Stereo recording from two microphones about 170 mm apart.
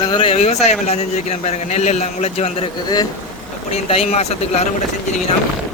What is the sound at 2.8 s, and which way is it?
Speech, 25° left (ahead or behind).